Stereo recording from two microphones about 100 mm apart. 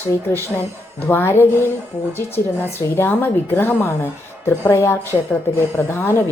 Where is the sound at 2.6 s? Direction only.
20° left (ahead or behind).